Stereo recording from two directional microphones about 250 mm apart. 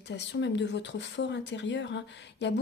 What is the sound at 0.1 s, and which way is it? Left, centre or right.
Speech, left.